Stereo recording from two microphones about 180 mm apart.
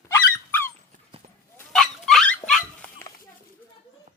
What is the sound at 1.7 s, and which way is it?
Dog, centre (ahead or behind).